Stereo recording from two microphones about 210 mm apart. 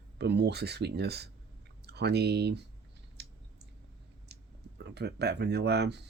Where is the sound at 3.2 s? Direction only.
55° right (ahead or behind).